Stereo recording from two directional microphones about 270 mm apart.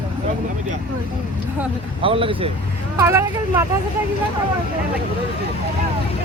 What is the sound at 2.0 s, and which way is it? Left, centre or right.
Speech, centre.